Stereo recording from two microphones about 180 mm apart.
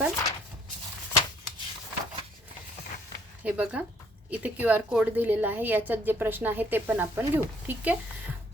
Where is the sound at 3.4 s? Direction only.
10° right (ahead or behind).